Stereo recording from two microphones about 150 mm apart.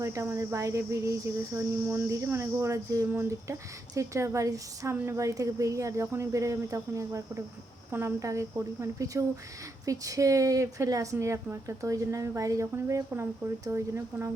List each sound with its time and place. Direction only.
0.0 s cricket: 20° right (ahead or behind)